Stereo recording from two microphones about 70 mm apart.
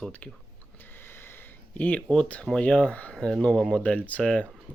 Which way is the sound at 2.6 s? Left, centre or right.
Centre.